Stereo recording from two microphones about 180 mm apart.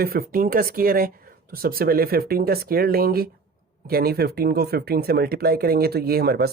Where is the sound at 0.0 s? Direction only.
55° right (ahead or behind).